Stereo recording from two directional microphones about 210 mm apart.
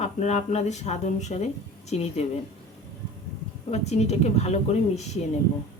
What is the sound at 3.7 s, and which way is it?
Speech, 30° left (ahead or behind).